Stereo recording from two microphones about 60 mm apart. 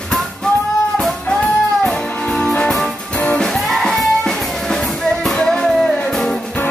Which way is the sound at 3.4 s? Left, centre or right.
Centre.